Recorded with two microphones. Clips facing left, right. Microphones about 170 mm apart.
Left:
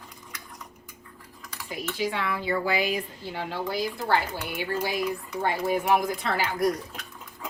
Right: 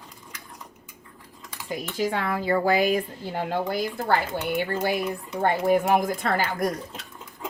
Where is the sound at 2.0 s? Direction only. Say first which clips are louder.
Right 3 dB; 45° right (ahead or behind).